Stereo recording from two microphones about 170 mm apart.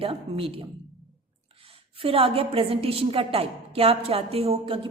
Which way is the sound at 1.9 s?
35° right (ahead or behind).